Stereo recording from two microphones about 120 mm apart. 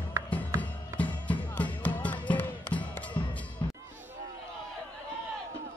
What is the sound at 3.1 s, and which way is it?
Music, 40° left (ahead or behind).